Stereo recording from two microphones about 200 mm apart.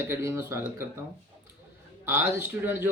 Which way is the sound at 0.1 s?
15° right (ahead or behind).